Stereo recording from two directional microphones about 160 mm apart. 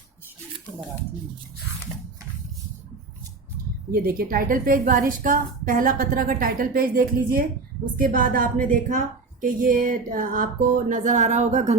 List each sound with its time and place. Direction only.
3.9 s a woman's voice: 70° right (ahead or behind); by 11.8 s 45° right (ahead or behind)